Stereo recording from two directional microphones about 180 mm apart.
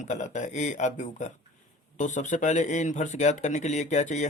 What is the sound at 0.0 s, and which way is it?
A man's voice, 40° left (ahead or behind).